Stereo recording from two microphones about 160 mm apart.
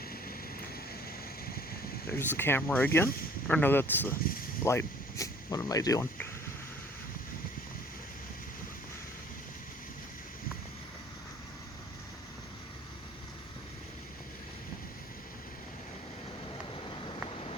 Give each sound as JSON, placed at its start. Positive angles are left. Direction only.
{"t": 2.0, "sound": "speech", "side_deg": 15}